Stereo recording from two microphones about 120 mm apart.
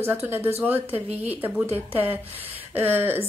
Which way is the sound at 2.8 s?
15° right (ahead or behind).